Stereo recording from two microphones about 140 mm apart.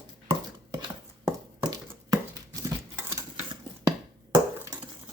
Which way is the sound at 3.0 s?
20° right (ahead or behind).